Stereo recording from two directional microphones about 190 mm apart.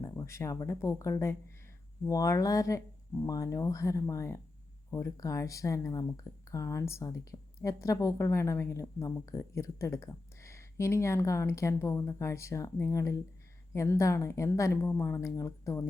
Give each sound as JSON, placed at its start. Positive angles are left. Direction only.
{"t": 0.0, "sound": "speech", "side_deg": 15}